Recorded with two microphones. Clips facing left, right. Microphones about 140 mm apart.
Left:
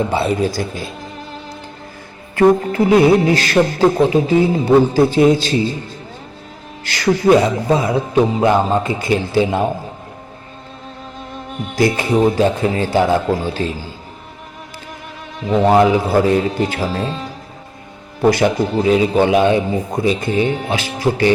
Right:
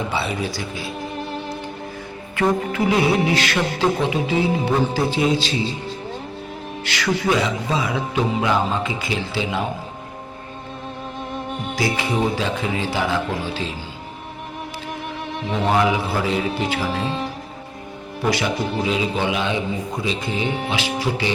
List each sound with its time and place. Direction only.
0.1 s a man's voice: 45° left (ahead or behind)
2.3 s a man's voice: 40° left (ahead or behind)
6.8 s a man's voice: 40° left (ahead or behind)
11.8 s a man's voice: 50° left (ahead or behind)
15.7 s a man's voice: 45° left (ahead or behind)
18.2 s a man's voice: 45° left (ahead or behind)